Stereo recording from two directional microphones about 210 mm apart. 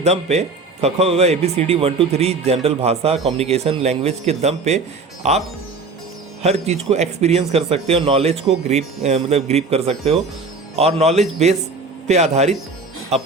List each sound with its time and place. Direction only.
0.0 s a man's voice: 30° right (ahead or behind)
6.4 s a man's voice: 30° right (ahead or behind)